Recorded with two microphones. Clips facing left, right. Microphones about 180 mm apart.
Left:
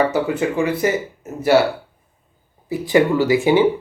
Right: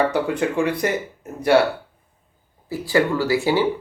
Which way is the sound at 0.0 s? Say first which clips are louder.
Left 2 dB; 5° left (ahead or behind).